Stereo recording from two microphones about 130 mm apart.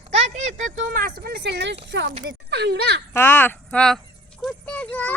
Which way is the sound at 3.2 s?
15° left (ahead or behind).